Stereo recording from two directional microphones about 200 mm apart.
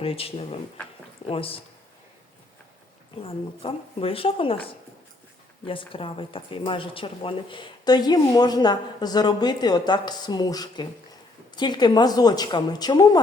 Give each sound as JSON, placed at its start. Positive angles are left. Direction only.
{"t": 0.0, "sound": "speech", "side_deg": 30}
{"t": 3.2, "sound": "speech", "side_deg": 30}